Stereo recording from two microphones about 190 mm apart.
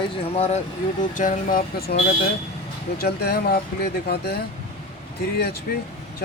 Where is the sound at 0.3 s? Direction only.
35° left (ahead or behind).